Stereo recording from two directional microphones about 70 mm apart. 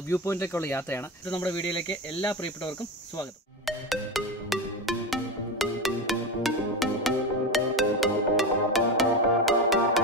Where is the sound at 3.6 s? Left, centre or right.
Centre.